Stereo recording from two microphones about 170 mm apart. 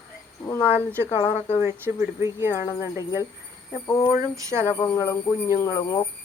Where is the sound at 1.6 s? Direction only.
15° right (ahead or behind).